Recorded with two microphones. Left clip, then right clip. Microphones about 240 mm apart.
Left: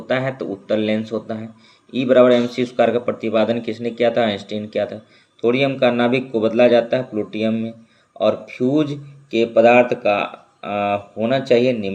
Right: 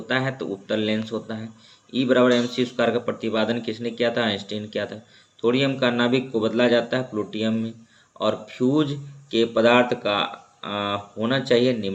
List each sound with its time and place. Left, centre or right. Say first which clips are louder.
0.1 s speech: left 4 dB; centre